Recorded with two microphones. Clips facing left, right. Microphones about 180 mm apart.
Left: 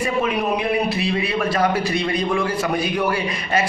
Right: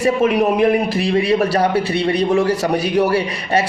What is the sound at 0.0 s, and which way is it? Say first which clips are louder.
A man's voice: right 6 dB; 45° right (ahead or behind).